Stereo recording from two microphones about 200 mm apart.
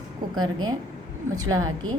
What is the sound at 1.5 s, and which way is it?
Speech, 20° right (ahead or behind).